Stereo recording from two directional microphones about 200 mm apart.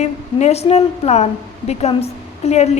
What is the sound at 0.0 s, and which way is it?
A woman's voice, 35° left (ahead or behind).